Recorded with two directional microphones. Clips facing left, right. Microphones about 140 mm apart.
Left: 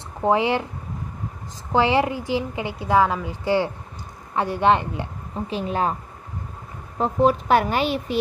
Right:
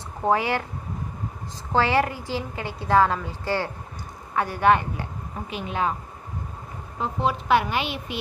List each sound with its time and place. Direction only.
0.2 s speech: 20° left (ahead or behind)
1.7 s a woman's voice: 20° left (ahead or behind)
5.5 s speech: 35° left (ahead or behind)
7.0 s speech: 40° left (ahead or behind)